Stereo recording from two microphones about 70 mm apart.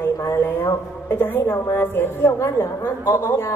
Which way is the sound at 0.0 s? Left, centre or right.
Left.